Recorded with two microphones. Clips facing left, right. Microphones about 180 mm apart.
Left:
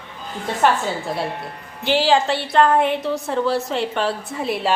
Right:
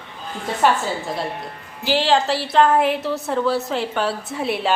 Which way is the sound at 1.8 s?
Centre (ahead or behind).